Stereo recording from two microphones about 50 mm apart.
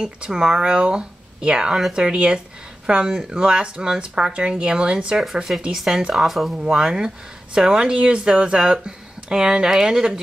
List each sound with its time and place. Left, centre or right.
0.0 s speech: centre
5.2 s speech: centre
6.6 s speech: centre